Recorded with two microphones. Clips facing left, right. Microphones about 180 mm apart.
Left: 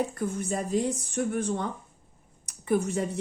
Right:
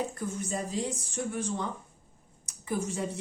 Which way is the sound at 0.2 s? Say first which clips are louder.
Left 4 dB; 55° left (ahead or behind).